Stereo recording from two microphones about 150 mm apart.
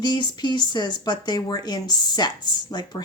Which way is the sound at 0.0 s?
30° left (ahead or behind).